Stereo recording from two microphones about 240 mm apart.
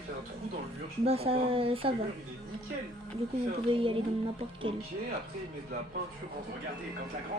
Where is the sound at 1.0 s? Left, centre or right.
Right.